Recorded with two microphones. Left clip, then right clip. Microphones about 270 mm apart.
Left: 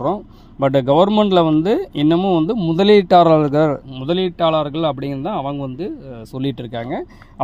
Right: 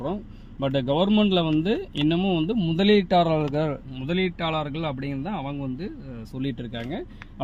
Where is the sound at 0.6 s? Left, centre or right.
Left.